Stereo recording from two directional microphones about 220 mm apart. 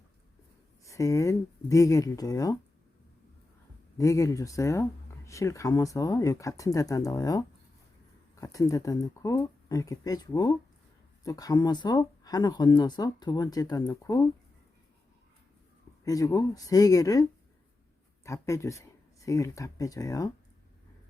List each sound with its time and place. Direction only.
0.9 s speech: 15° left (ahead or behind)
3.9 s speech: 15° left (ahead or behind)
16.0 s speech: 15° left (ahead or behind)